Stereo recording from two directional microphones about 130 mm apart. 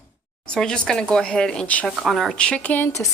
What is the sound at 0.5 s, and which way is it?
Speech, 5° left (ahead or behind).